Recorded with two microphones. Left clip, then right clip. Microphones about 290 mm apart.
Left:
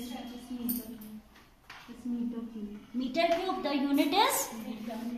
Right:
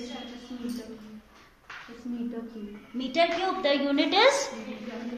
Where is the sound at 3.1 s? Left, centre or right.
Centre.